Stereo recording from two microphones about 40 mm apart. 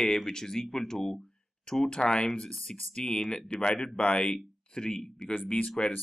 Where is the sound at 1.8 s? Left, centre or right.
Left.